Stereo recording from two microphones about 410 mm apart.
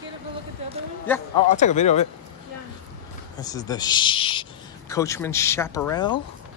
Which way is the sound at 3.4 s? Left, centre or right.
Centre.